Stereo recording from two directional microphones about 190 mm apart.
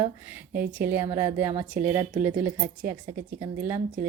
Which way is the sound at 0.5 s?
50° right (ahead or behind).